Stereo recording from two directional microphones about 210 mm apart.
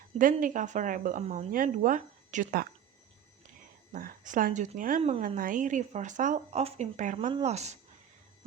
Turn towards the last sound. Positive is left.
turn(degrees=-30)  # may be behind; listen again after turning